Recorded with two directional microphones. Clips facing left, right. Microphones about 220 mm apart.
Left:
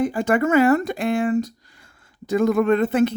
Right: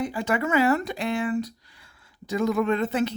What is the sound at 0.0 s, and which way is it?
Speech, 50° left (ahead or behind).